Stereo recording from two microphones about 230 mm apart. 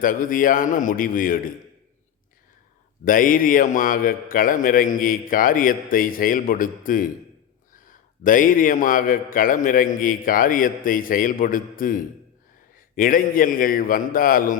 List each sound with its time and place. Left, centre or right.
0.0 s a man's voice: left
3.0 s a man's voice: left